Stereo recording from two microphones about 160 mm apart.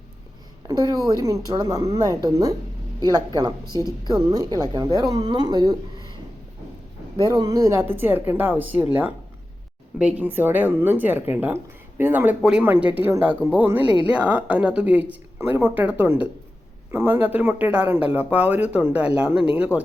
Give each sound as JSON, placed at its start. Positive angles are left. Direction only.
{"t": 1.2, "sound": "a woman's voice", "side_deg": -25}
{"t": 7.2, "sound": "speech", "side_deg": -25}